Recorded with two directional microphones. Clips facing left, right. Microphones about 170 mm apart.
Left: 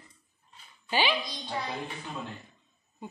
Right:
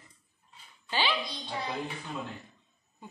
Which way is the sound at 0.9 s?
15° left (ahead or behind).